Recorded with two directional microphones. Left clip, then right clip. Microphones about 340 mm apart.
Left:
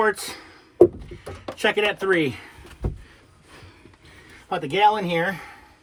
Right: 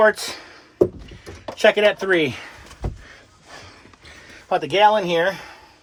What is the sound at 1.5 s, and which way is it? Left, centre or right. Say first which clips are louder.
Speech: right 6 dB; centre.